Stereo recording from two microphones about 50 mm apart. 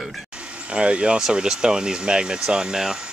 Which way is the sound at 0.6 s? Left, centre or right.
Right.